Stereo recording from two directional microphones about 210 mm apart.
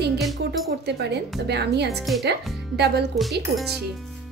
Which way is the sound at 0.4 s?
50° right (ahead or behind).